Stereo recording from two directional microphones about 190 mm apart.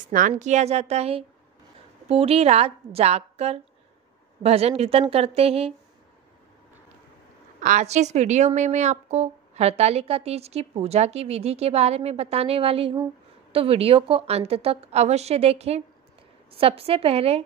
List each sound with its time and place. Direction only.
0.3 s a woman's voice: 35° right (ahead or behind)
7.6 s a woman's voice: 40° right (ahead or behind)